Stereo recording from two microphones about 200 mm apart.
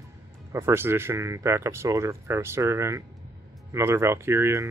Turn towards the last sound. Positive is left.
turn(degrees=-15)  # may be behind; listen again after turning